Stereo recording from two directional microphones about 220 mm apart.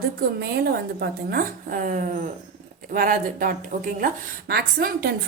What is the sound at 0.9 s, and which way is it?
A woman's voice, 45° right (ahead or behind).